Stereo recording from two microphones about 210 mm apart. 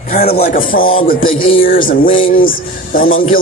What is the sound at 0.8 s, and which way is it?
Music, 70° left (ahead or behind).